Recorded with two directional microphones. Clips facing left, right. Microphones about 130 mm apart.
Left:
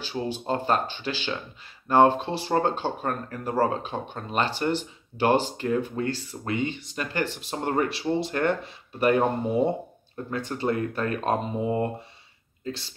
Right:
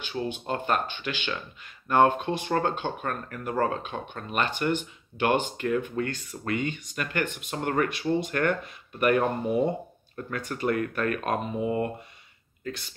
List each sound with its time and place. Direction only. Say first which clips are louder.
0.3 s speech: left 4 dB; 35° left (ahead or behind)